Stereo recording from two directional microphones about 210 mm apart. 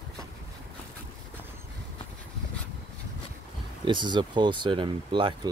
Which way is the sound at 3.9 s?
20° right (ahead or behind).